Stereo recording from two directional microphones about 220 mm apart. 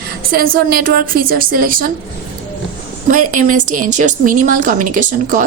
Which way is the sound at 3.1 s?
35° right (ahead or behind).